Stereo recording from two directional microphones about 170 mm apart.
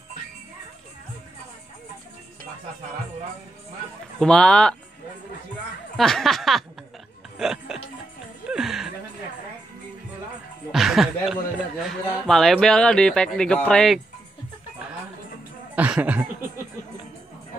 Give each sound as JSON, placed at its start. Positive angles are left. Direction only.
{"t": 4.2, "sound": "speech", "side_deg": 5}
{"t": 5.9, "sound": "a sound", "side_deg": 0}
{"t": 7.3, "sound": "music", "side_deg": -5}
{"t": 10.7, "sound": "speech", "side_deg": 0}
{"t": 15.7, "sound": "speech", "side_deg": -10}